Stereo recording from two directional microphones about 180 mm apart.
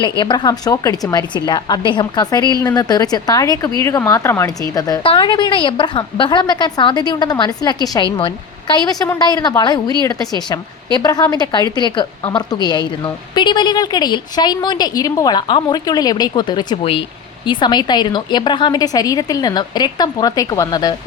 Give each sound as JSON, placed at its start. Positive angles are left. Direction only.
{"t": 0.0, "sound": "a woman's voice", "side_deg": 25}